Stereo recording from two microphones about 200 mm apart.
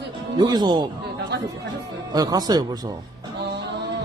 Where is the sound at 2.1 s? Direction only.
20° right (ahead or behind).